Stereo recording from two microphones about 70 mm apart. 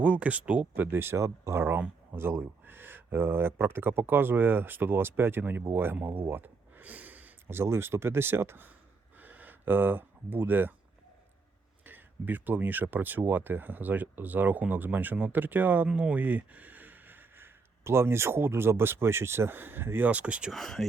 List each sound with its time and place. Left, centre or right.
0.0 s speech: right
0.9 s speech: right
7.4 s speech: right
9.1 s a sound: right
11.9 s speech: right
20.1 s speech: centre
20.5 s speech: centre